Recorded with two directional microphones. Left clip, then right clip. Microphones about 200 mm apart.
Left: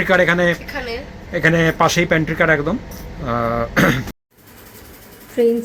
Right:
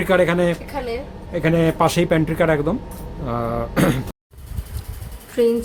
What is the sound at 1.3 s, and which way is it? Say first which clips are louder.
Speech: left 3 dB; centre (ahead or behind).